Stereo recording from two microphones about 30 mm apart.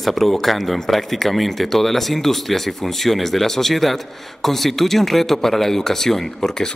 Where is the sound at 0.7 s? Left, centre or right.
Centre.